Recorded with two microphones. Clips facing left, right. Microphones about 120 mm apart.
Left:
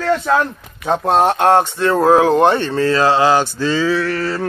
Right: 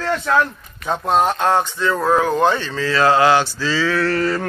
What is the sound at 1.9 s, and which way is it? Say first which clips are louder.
Speech: left 6 dB; 40° left (ahead or behind).